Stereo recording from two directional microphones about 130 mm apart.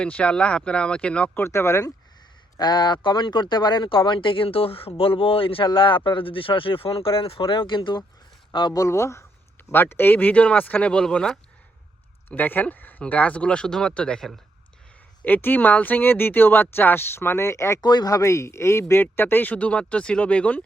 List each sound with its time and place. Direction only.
0.0 s speech: 10° left (ahead or behind)
1.5 s speech: 20° left (ahead or behind)
2.6 s speech: 35° left (ahead or behind)
8.8 s speech: 20° left (ahead or behind)